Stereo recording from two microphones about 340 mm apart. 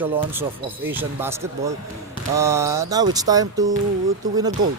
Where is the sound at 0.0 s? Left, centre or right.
Centre.